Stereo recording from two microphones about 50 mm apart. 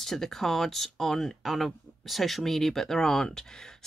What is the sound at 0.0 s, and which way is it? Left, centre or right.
Speech, centre.